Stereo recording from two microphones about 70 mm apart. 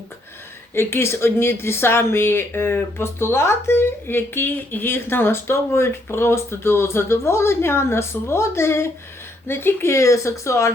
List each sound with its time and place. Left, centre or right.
0.7 s speech: left